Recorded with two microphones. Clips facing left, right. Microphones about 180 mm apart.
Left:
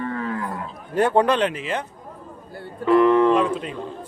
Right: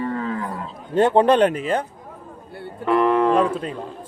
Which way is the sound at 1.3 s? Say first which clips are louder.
Right 5 dB; 55° right (ahead or behind).